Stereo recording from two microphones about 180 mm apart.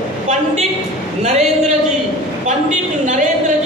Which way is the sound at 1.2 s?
40° right (ahead or behind).